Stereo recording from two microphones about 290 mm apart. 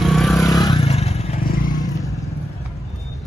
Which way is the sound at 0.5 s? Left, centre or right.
Centre.